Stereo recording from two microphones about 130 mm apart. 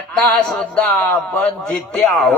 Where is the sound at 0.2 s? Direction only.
Centre (ahead or behind).